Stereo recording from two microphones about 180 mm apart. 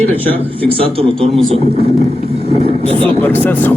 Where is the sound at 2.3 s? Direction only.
35° right (ahead or behind).